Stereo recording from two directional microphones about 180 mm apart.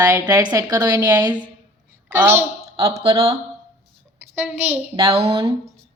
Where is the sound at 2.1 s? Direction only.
15° right (ahead or behind).